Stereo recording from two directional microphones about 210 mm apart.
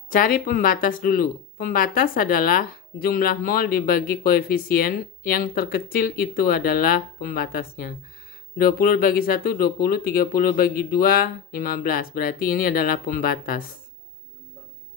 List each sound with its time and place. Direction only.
0.1 s speech: 40° left (ahead or behind)